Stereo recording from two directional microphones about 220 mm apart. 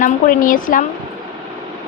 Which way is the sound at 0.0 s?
40° left (ahead or behind).